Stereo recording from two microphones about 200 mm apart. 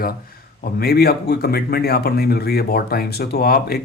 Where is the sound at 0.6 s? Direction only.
50° left (ahead or behind).